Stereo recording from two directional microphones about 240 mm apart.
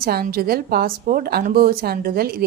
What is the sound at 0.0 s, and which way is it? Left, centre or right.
A woman's voice, right.